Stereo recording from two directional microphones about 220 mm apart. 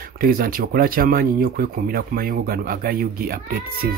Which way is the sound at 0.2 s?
40° right (ahead or behind).